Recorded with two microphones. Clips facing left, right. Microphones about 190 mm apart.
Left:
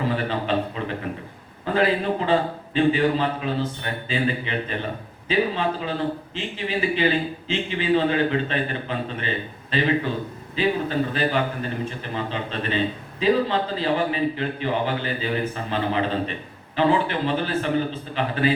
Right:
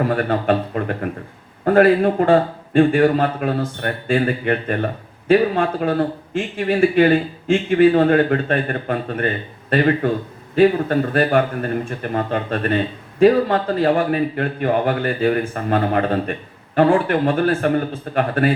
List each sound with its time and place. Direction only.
0.0 s a man's voice: 50° right (ahead or behind)